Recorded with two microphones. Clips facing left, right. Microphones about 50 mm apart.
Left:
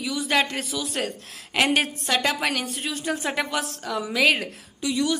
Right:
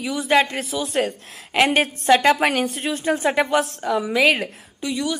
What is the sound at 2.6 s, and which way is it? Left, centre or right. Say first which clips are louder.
A woman's voice: right 6 dB; centre.